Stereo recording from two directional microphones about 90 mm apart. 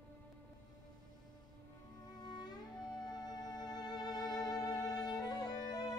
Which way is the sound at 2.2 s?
50° left (ahead or behind).